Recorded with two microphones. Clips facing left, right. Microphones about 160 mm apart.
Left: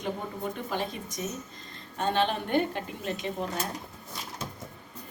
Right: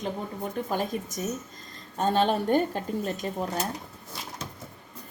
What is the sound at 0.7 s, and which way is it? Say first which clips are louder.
Speech: right 4 dB; 45° right (ahead or behind).